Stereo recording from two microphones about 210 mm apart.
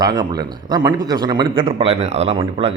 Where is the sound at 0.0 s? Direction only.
20° right (ahead or behind).